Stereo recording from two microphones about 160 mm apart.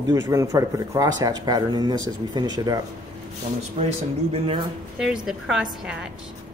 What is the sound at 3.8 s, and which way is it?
Speech, 40° right (ahead or behind).